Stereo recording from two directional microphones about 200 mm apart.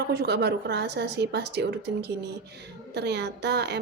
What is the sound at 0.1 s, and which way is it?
A woman's voice, 60° right (ahead or behind).